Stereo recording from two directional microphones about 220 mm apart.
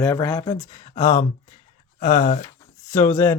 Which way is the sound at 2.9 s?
10° left (ahead or behind).